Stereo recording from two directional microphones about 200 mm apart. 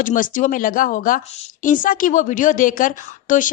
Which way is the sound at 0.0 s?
40° left (ahead or behind).